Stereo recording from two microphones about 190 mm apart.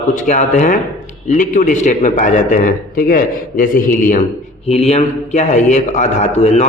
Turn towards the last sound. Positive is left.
turn(degrees=35)  # may be behind; listen again after turning